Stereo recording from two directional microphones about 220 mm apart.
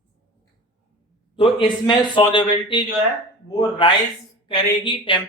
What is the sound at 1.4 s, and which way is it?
A man's voice, 20° left (ahead or behind).